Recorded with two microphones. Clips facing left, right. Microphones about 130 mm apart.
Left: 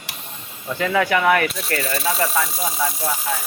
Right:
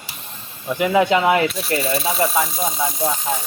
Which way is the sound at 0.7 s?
15° right (ahead or behind).